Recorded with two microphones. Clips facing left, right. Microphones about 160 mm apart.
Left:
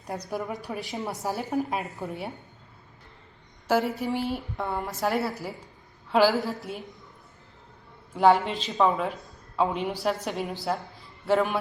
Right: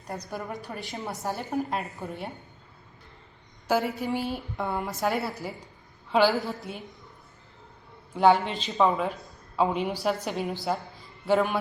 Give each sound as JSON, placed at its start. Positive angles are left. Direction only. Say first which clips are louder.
{"t": 0.1, "sound": "a woman's voice", "louder": "left 3 dB", "side_deg": 0}
{"t": 3.7, "sound": "a woman's voice", "louder": "left 1 dB", "side_deg": 0}
{"t": 8.1, "sound": "a woman's voice", "louder": "left 1 dB", "side_deg": 0}